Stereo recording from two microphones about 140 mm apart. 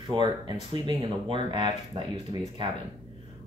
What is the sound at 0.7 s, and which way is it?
Speech, 35° right (ahead or behind).